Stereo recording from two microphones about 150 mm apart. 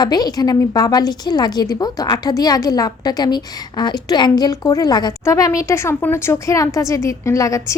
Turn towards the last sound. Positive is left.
turn(degrees=20)  # may be behind; listen again after turning